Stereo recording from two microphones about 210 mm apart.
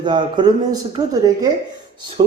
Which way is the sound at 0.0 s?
20° right (ahead or behind).